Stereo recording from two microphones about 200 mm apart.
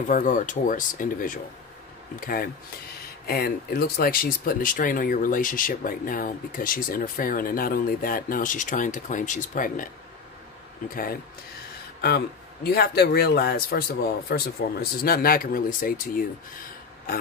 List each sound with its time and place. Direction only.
0.1 s speech: 40° left (ahead or behind)
12.6 s speech: 50° left (ahead or behind)